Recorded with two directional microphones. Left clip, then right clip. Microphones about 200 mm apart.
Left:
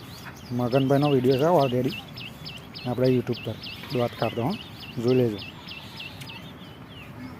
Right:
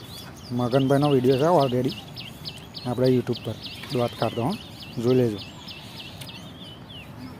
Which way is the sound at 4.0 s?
5° right (ahead or behind).